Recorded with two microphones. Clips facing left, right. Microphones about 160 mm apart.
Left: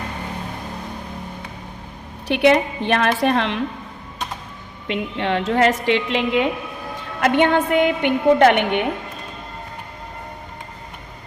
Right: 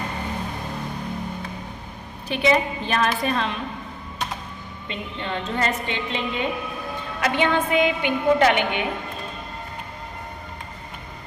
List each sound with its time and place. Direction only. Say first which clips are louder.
2.2 s a woman's voice: left 5 dB; 70° left (ahead or behind)
4.9 s a woman's voice: left 8 dB; 75° left (ahead or behind)
7.2 s a woman's voice: left 5 dB; 55° left (ahead or behind)